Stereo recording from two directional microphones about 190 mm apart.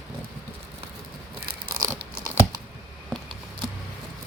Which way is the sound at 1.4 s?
50° right (ahead or behind).